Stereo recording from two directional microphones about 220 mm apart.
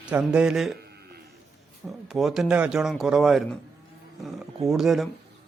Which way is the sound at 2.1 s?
Centre (ahead or behind).